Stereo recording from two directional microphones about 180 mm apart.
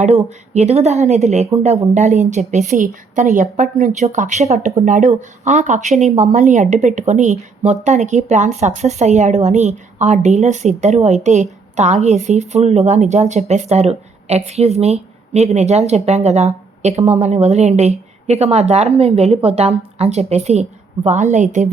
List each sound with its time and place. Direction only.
0.5 s a woman's voice: 40° right (ahead or behind)